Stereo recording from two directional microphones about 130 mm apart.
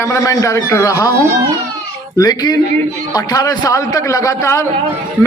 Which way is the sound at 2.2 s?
30° left (ahead or behind).